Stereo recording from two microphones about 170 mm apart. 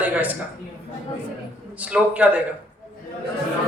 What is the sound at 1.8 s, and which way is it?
Speech, 10° right (ahead or behind).